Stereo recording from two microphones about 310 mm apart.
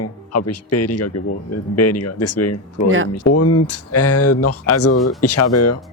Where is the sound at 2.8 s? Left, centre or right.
Right.